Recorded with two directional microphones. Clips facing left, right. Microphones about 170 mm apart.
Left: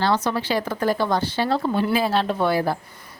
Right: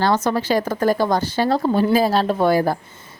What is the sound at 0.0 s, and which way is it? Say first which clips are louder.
A woman's voice: right 3 dB; 45° right (ahead or behind).